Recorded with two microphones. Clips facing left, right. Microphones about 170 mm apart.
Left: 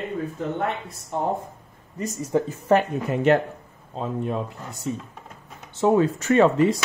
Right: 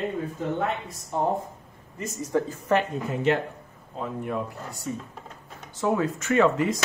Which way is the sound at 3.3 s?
50° left (ahead or behind).